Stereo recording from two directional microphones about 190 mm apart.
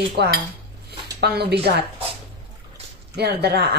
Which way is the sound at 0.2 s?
60° right (ahead or behind).